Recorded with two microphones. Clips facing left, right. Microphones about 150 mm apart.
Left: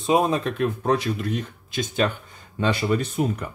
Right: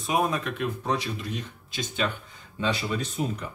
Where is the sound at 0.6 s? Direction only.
50° left (ahead or behind).